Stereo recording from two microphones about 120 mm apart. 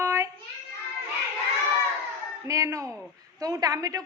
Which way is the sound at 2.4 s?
25° right (ahead or behind).